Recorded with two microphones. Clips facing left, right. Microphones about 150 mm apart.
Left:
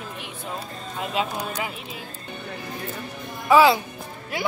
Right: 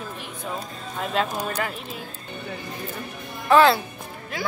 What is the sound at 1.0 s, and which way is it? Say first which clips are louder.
Speech: right 2 dB; 5° left (ahead or behind).